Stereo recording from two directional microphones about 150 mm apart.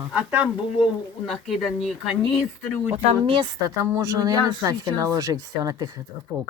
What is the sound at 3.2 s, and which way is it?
Speech, 35° right (ahead or behind).